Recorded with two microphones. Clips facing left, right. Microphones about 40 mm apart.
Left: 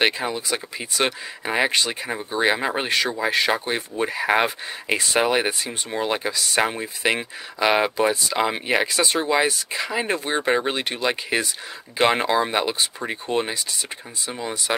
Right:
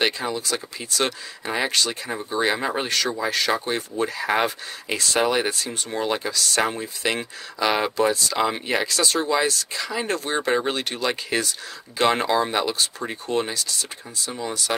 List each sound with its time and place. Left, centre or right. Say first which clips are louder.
0.0 s speech: left 2 dB; centre